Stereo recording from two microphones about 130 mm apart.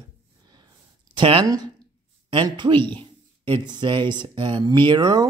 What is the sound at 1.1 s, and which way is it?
Speech, 40° right (ahead or behind).